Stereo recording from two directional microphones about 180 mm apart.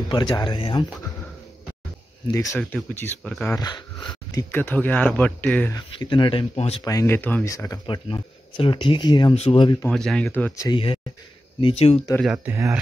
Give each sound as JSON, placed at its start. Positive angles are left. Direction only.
{"t": 0.1, "sound": "speech", "side_deg": 25}
{"t": 2.3, "sound": "speech", "side_deg": 20}
{"t": 2.6, "sound": "speech", "side_deg": 5}
{"t": 3.5, "sound": "speech", "side_deg": 25}
{"t": 5.8, "sound": "speech", "side_deg": 25}
{"t": 6.8, "sound": "speech", "side_deg": 20}
{"t": 9.8, "sound": "speech", "side_deg": 0}
{"t": 10.7, "sound": "speech", "side_deg": 30}
{"t": 12.3, "sound": "speech", "side_deg": -15}